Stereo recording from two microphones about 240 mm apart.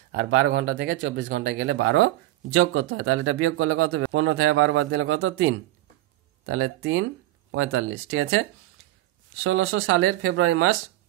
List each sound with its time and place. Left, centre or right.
0.1 s speech: right